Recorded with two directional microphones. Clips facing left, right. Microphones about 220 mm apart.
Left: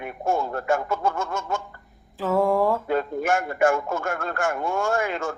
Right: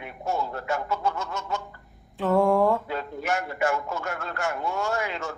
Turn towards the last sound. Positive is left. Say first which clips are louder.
# left 4 dB
turn(degrees=50)  # may be behind; listen again after turning